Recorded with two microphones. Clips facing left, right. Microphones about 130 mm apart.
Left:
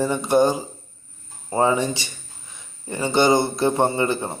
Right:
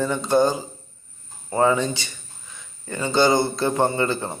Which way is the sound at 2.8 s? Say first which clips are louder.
Left 1 dB; 25° left (ahead or behind).